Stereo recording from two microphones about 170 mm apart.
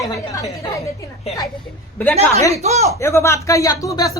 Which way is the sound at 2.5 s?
40° right (ahead or behind).